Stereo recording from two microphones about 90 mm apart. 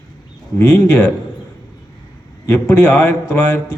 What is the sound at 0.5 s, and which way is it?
Speech, 15° left (ahead or behind).